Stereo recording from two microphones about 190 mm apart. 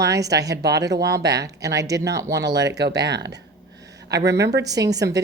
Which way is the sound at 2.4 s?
65° right (ahead or behind).